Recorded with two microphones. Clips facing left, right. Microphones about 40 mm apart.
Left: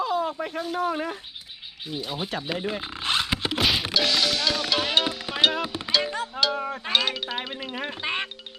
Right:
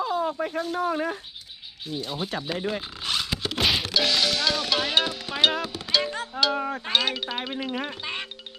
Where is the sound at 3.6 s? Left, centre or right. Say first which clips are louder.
Right 1 dB; centre.